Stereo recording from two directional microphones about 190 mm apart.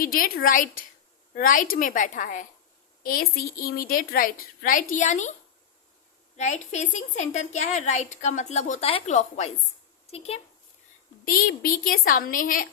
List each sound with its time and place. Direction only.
0.0 s a woman's voice: 50° left (ahead or behind)
6.3 s a woman's voice: 40° left (ahead or behind)
11.3 s a woman's voice: 50° left (ahead or behind)